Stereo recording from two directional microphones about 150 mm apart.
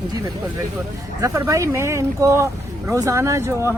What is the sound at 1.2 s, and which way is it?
Speech, 20° right (ahead or behind).